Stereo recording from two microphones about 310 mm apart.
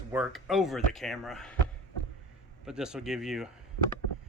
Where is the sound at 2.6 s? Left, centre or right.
Centre.